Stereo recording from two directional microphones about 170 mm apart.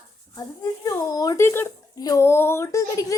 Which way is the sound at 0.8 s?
20° left (ahead or behind).